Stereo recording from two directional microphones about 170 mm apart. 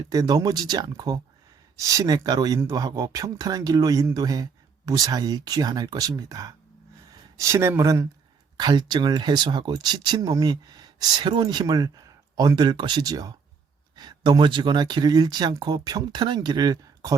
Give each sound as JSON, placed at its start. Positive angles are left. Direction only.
{"t": 0.1, "sound": "speech", "side_deg": -20}